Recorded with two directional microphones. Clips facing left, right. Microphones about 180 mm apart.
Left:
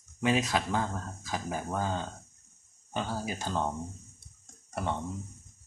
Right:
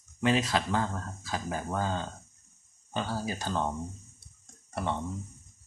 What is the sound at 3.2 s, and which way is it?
Speech, 10° left (ahead or behind).